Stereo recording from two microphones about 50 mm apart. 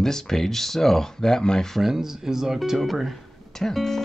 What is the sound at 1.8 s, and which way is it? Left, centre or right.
Speech, centre.